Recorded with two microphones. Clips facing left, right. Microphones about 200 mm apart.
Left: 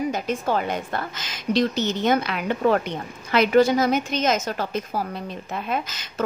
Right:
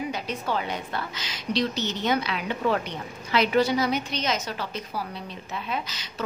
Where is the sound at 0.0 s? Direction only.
45° left (ahead or behind).